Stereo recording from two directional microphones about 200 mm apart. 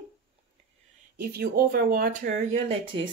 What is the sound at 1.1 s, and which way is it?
Speech, 50° right (ahead or behind).